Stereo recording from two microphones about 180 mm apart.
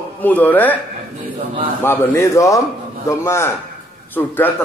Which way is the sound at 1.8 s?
10° left (ahead or behind).